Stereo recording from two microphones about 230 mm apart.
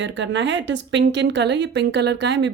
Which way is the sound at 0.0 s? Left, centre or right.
Right.